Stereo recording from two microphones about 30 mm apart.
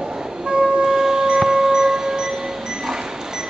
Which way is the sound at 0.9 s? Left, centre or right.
Centre.